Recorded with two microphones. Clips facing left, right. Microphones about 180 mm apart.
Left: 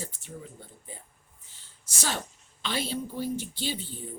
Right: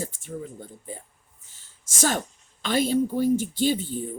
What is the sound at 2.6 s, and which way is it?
Speech, 45° right (ahead or behind).